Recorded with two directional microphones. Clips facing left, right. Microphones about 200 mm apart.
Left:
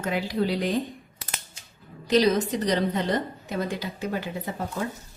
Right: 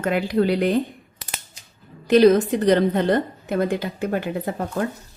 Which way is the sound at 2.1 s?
55° right (ahead or behind).